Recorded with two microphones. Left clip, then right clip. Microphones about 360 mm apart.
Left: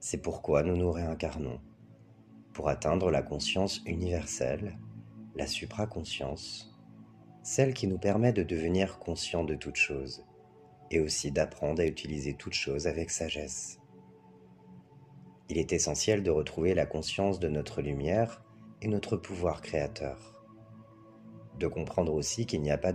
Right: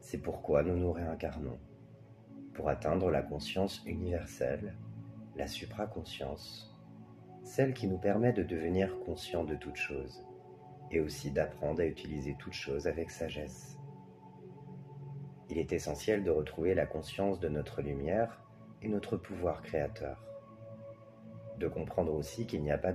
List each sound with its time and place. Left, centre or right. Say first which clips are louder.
0.0 s speech: left 4 dB; left
2.5 s speech: left 3 dB; left
15.4 s speech: left 5 dB; left
21.5 s speech: left 3 dB; left